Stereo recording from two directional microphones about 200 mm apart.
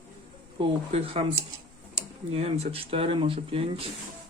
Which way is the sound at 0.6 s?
25° right (ahead or behind).